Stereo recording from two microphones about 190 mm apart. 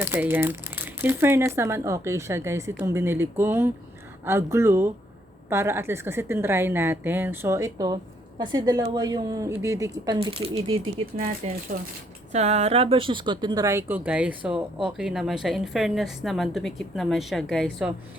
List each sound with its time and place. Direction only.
0.0 s a woman's voice: 10° right (ahead or behind)
10.2 s a woman's voice: 30° right (ahead or behind); by 17.9 s centre (ahead or behind)